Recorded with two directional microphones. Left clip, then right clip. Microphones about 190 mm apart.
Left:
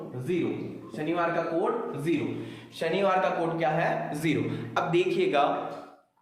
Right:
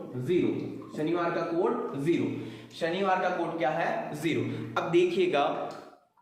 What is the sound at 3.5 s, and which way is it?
Speech, 15° left (ahead or behind).